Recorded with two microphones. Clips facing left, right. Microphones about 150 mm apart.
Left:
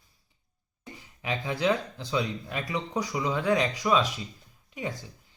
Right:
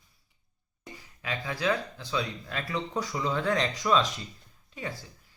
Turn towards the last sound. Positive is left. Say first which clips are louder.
# left 3 dB
turn(degrees=20)  # may be behind; listen again after turning